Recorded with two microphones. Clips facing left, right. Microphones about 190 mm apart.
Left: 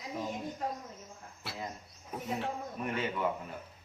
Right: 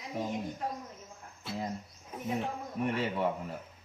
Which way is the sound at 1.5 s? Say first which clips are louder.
Right 5 dB; 70° left (ahead or behind).